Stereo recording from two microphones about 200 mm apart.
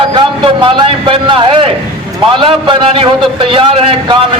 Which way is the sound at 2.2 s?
25° right (ahead or behind).